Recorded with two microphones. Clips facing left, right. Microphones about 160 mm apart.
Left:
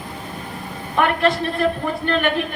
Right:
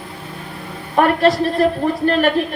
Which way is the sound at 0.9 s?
35° right (ahead or behind).